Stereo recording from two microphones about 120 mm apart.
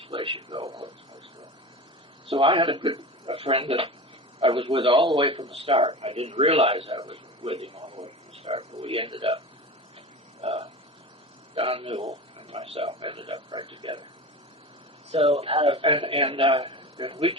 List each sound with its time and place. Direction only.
0.0 s a man's voice: 45° right (ahead or behind)
0.7 s speech: 30° right (ahead or behind)
2.2 s a man's voice: 45° right (ahead or behind)
10.4 s a sound: 65° right (ahead or behind)
11.5 s a man's voice: 50° right (ahead or behind)
15.1 s a man's voice: 55° right (ahead or behind)